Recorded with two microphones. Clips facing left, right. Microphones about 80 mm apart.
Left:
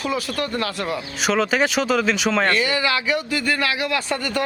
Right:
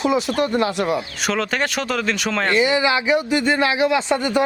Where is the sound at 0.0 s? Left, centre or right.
Right.